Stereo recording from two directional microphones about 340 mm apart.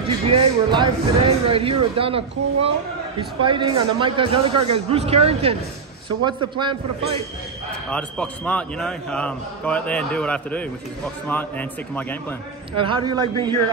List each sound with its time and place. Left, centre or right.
0.0 s a man's voice: centre
7.9 s a man's voice: centre
12.7 s a man's voice: centre